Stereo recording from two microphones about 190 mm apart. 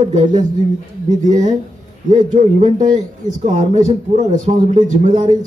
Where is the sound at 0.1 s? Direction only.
40° right (ahead or behind).